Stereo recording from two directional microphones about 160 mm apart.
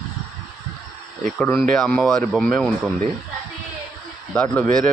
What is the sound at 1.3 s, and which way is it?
Speech, 5° left (ahead or behind).